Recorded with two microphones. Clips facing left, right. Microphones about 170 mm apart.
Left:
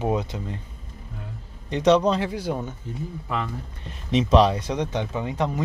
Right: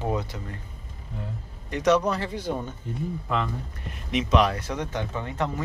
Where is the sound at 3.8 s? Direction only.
30° left (ahead or behind).